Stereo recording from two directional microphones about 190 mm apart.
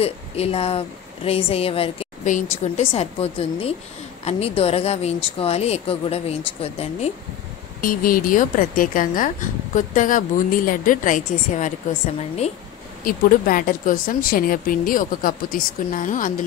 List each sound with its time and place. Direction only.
0.0 s a woman's voice: 30° left (ahead or behind)
7.8 s a woman's voice: 50° left (ahead or behind)
13.0 s a woman's voice: 50° left (ahead or behind)